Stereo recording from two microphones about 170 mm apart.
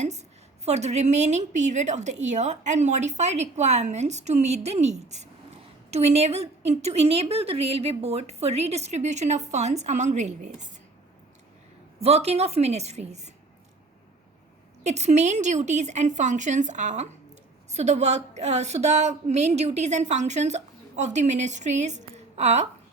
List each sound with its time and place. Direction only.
0.0 s a woman's voice: 40° right (ahead or behind)
11.9 s a woman's voice: 40° right (ahead or behind)
14.8 s a woman's voice: 40° right (ahead or behind)